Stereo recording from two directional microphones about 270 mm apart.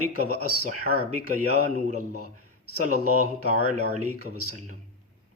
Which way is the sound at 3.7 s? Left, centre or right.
Right.